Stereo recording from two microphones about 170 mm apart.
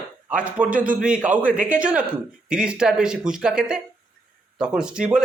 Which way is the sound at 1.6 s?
5° right (ahead or behind).